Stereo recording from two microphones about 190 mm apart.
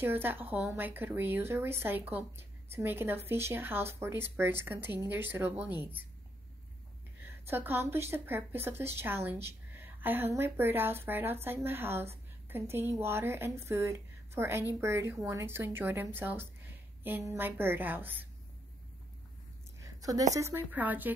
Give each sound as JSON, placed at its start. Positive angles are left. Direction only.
{"t": 0.0, "sound": "speech", "side_deg": -10}
{"t": 7.4, "sound": "speech", "side_deg": -10}
{"t": 19.8, "sound": "a sound", "side_deg": -20}
{"t": 20.3, "sound": "speech", "side_deg": -15}